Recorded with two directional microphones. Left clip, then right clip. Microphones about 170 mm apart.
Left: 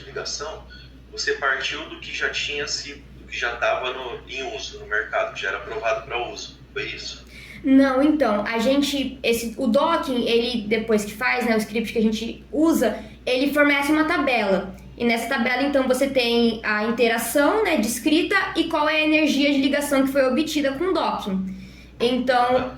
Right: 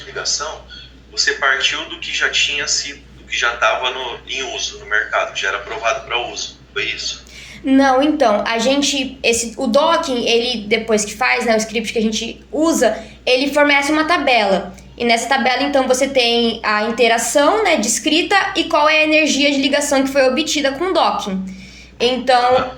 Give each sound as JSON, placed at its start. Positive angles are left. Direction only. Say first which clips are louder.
{"t": 0.1, "sound": "a man's voice", "louder": "right 8 dB", "side_deg": -15}
{"t": 7.8, "sound": "a woman's voice", "louder": "right 6 dB", "side_deg": 20}